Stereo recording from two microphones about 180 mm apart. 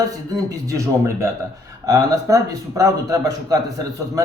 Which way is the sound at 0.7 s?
15° right (ahead or behind).